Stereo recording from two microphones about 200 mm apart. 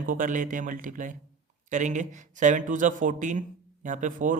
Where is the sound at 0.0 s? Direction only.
45° right (ahead or behind).